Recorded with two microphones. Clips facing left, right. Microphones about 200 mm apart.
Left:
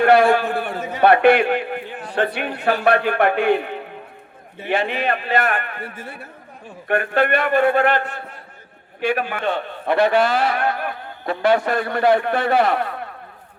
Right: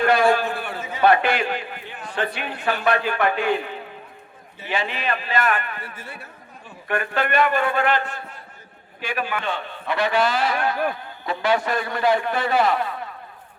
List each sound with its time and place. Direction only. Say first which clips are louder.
0.0 s a man's voice: left 4 dB; 65° left (ahead or behind); by 0.9 s 45° left (ahead or behind)
0.9 s a man's voice: left 5 dB; 65° left (ahead or behind)